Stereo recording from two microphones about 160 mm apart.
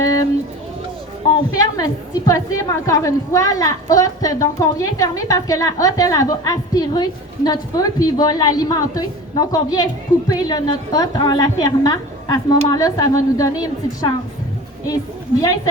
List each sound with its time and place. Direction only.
0.0 s a sound: 20° left (ahead or behind)
1.8 s a woman's voice: 20° left (ahead or behind)
15.4 s a woman's voice: 20° left (ahead or behind)